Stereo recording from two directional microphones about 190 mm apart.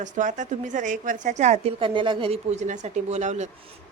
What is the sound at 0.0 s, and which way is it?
A woman's voice, 40° right (ahead or behind).